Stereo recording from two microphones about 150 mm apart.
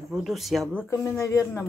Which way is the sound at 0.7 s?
20° left (ahead or behind).